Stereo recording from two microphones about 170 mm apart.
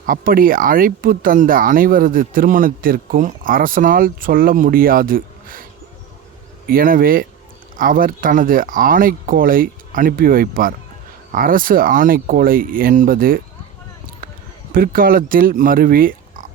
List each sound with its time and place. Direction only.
0.0 s speech: 55° right (ahead or behind)
6.7 s speech: 55° right (ahead or behind)
14.7 s speech: 55° right (ahead or behind)